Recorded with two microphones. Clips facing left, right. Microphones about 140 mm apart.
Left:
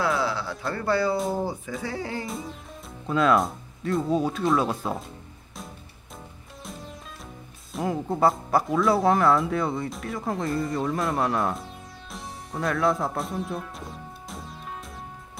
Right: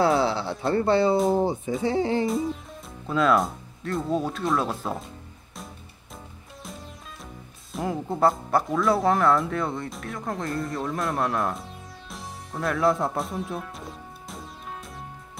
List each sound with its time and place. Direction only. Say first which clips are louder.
0.0 s a sound: right 4 dB; 25° right (ahead or behind)
1.3 s speech: right 5 dB; 25° right (ahead or behind)
2.2 s speech: right 9 dB; centre (ahead or behind)
7.7 s speech: left 1 dB; centre (ahead or behind)